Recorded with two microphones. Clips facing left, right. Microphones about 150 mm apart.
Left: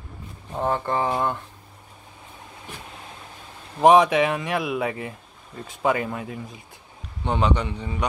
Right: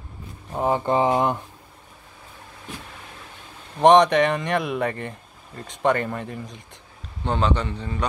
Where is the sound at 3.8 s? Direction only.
5° left (ahead or behind).